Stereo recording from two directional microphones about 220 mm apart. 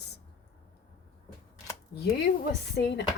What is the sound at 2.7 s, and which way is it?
Speech, 50° left (ahead or behind).